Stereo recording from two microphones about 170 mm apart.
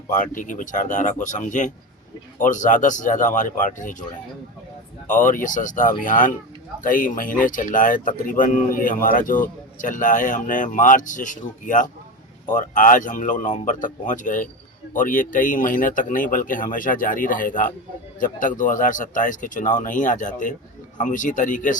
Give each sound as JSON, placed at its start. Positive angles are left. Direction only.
{"t": 0.1, "sound": "speech", "side_deg": 50}
{"t": 5.0, "sound": "speech", "side_deg": 50}